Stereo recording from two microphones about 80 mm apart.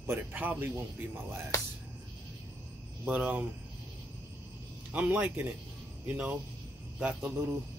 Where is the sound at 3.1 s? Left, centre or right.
Centre.